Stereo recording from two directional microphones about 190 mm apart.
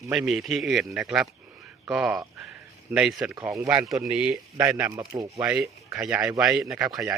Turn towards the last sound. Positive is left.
turn(degrees=-15)  # may be behind; listen again after turning